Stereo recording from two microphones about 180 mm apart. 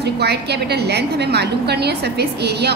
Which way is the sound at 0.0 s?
65° right (ahead or behind).